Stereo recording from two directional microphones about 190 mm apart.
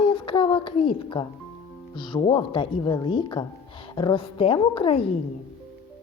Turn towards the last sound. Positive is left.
turn(degrees=30)  # may be behind; listen again after turning